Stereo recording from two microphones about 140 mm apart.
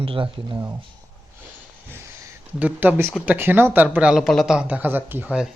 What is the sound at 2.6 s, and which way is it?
Speech, 10° right (ahead or behind).